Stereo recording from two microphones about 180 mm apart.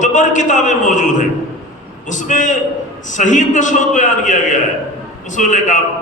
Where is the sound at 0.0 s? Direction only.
45° left (ahead or behind).